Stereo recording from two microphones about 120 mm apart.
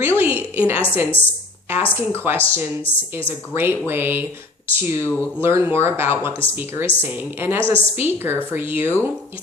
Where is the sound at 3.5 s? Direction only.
20° right (ahead or behind).